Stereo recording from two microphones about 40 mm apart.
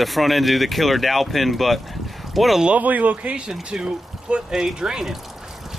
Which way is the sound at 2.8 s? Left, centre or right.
Right.